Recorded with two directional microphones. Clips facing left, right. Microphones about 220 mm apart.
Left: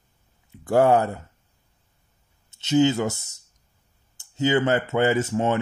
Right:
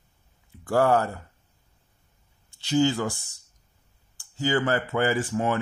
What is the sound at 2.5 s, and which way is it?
Speech, 20° left (ahead or behind).